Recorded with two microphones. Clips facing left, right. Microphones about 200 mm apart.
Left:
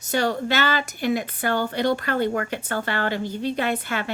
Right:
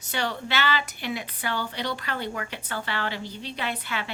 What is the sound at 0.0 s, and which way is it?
A woman's voice, 45° left (ahead or behind).